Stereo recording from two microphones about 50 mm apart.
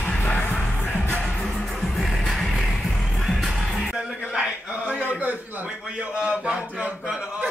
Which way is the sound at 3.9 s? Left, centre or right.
Centre.